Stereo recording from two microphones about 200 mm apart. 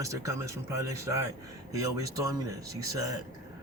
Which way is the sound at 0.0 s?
15° right (ahead or behind).